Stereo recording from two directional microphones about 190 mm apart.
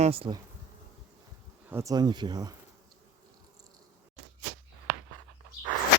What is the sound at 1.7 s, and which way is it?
Speech, 15° right (ahead or behind).